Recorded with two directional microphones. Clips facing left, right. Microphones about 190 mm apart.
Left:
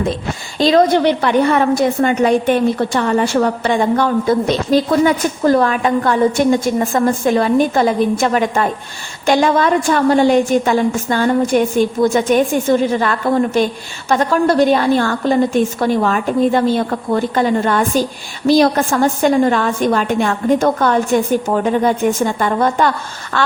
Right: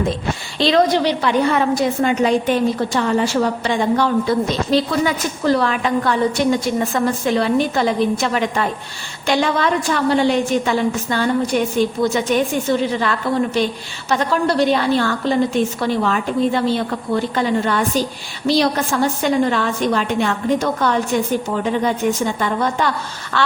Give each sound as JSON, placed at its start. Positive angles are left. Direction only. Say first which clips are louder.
{"t": 0.6, "sound": "a woman's voice", "louder": "left 4 dB", "side_deg": 50}